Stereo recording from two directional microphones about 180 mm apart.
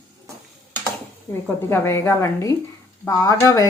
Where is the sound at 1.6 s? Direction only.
15° left (ahead or behind).